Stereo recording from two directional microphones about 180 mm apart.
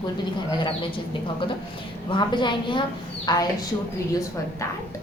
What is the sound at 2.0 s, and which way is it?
A woman's voice, 25° left (ahead or behind).